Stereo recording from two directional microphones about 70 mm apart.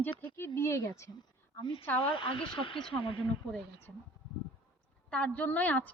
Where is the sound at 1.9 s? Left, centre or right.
Left.